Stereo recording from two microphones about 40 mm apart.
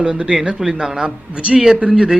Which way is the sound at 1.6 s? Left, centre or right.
Centre.